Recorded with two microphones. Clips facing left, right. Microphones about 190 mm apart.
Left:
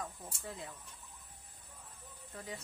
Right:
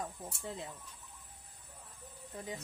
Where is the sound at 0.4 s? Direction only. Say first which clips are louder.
Right 3 dB; 25° right (ahead or behind).